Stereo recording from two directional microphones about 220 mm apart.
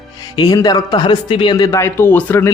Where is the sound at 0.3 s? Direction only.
15° left (ahead or behind).